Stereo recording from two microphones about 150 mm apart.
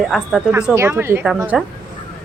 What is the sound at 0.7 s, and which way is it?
Speech, 15° right (ahead or behind).